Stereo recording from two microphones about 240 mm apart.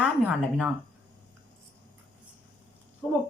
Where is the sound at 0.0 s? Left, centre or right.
Centre.